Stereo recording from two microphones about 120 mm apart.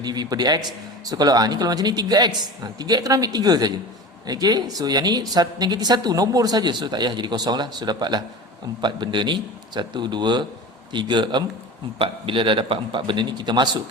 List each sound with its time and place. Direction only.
0.0 s a man's voice: 35° right (ahead or behind)